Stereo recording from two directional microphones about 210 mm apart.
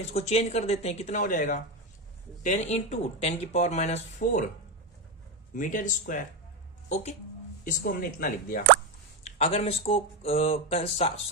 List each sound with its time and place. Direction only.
0.1 s speech: 30° left (ahead or behind)
5.5 s a woman's voice: 40° left (ahead or behind)
9.2 s speech: 30° left (ahead or behind)